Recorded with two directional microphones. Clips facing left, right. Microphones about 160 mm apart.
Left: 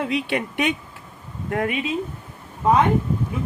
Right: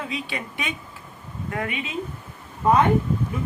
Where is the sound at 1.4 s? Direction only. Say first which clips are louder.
Left 5 dB; 50° left (ahead or behind).